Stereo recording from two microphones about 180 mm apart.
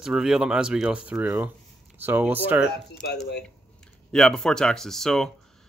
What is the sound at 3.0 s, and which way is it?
Speech, 65° left (ahead or behind).